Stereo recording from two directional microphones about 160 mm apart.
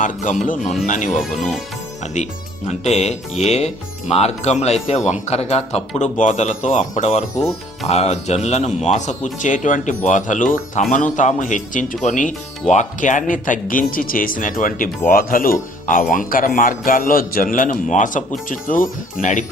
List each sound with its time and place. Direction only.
0.0 s speech: 50° left (ahead or behind)
1.2 s speech: centre (ahead or behind)
2.6 s speech: 45° left (ahead or behind)